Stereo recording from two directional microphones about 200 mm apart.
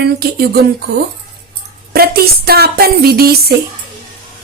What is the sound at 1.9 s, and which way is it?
Speech, 50° right (ahead or behind).